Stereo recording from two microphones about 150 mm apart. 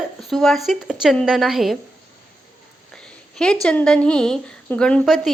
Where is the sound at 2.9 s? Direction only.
5° left (ahead or behind).